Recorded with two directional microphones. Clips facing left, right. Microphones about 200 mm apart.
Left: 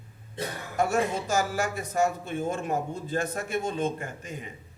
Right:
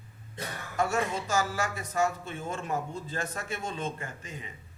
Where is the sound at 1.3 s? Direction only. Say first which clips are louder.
Left 3 dB; 55° left (ahead or behind).